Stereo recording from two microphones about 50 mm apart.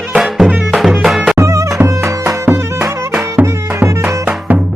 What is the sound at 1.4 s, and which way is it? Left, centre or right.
Music, right.